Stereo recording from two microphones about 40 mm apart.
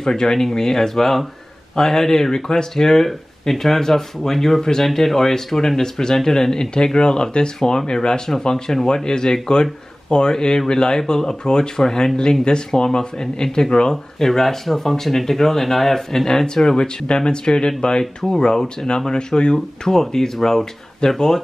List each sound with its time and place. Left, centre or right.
0.0 s speech: centre